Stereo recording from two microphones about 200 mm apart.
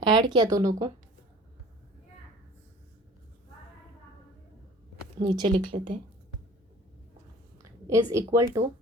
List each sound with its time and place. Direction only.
0.0 s speech: 20° right (ahead or behind)
5.2 s speech: 20° right (ahead or behind)
7.6 s a woman's voice: 15° right (ahead or behind)